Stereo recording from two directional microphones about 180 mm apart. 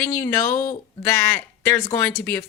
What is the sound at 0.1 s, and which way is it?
Speech, 10° left (ahead or behind).